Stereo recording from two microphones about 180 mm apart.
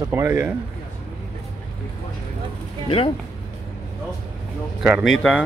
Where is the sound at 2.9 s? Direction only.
30° left (ahead or behind).